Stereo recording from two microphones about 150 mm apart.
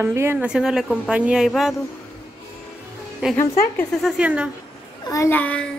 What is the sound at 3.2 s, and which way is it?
A woman's voice, 5° right (ahead or behind).